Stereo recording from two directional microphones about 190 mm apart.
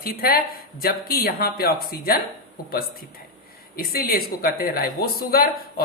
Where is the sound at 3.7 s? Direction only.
50° left (ahead or behind).